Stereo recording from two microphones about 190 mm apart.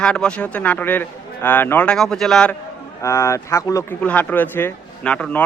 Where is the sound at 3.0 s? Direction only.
15° left (ahead or behind).